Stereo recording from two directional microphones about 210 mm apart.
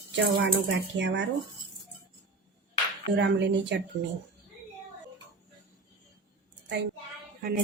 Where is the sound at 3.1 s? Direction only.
55° right (ahead or behind).